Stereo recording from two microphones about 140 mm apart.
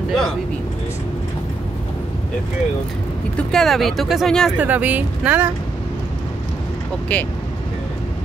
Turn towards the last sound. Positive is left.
turn(degrees=10)  # may be behind; listen again after turning